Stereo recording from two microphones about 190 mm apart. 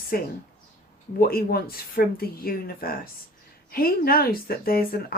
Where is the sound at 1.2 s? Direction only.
50° left (ahead or behind).